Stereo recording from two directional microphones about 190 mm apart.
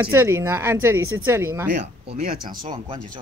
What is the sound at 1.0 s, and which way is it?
Speech, 90° right.